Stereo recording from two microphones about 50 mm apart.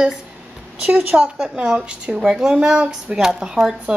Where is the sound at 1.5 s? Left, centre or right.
Centre.